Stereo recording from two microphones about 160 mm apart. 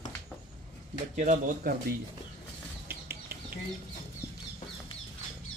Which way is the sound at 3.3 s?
70° right (ahead or behind).